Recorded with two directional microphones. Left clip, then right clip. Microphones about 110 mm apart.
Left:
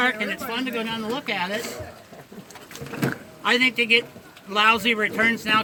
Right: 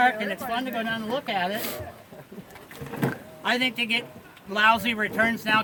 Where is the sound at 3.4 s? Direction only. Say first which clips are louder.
Left 5 dB; 30° right (ahead or behind).